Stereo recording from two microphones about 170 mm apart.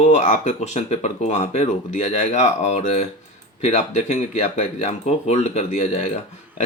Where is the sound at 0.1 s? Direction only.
45° left (ahead or behind).